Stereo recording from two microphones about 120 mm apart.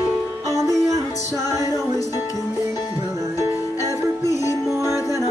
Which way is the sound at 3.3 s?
30° left (ahead or behind).